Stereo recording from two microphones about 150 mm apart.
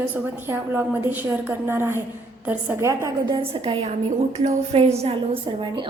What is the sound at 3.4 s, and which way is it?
A woman's voice, 40° right (ahead or behind).